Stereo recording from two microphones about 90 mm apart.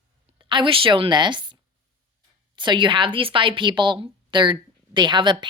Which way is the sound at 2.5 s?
60° right (ahead or behind).